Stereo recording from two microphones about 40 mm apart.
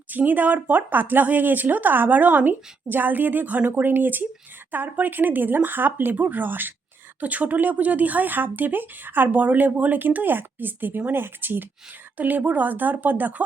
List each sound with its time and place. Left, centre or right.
0.1 s speech: right
3.8 s speech: right
7.2 s speech: right
12.1 s speech: right